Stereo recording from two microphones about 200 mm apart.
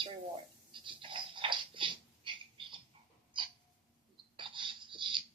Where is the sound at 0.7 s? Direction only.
25° right (ahead or behind).